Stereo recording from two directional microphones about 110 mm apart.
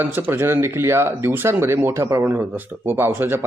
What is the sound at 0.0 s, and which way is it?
Speech, 20° right (ahead or behind).